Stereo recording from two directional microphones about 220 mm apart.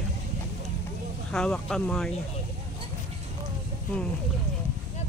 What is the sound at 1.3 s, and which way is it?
Speech, 5° left (ahead or behind).